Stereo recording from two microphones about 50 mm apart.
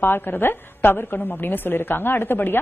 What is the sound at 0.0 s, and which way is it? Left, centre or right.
A woman's voice, left.